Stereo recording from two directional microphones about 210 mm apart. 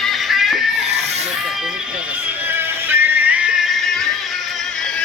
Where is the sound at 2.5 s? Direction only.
10° right (ahead or behind).